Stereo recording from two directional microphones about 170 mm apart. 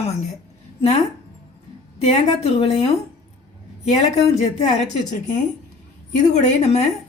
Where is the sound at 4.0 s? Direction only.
40° left (ahead or behind).